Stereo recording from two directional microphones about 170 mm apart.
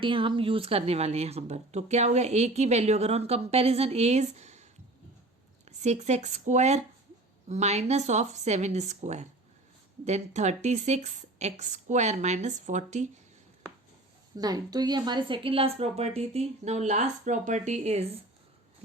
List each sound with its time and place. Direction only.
0.0 s speech: 30° right (ahead or behind)
14.3 s speech: 25° right (ahead or behind); by 18.2 s 40° right (ahead or behind)